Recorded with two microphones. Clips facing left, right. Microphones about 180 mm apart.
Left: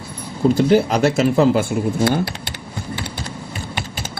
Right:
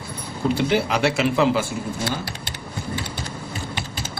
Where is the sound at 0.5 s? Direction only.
40° left (ahead or behind); by 2.5 s 60° left (ahead or behind).